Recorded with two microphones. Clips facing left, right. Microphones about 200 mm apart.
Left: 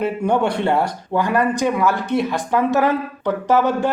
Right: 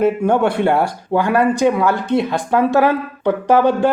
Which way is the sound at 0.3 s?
5° right (ahead or behind).